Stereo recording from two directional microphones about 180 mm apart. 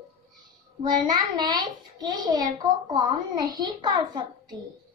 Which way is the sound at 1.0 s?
25° right (ahead or behind).